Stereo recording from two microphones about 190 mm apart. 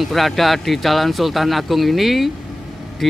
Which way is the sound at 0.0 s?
Centre (ahead or behind).